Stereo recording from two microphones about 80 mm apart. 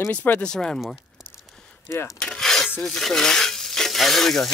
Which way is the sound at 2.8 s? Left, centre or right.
Centre.